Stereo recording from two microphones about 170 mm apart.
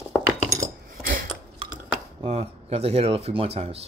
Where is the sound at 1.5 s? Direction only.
30° right (ahead or behind).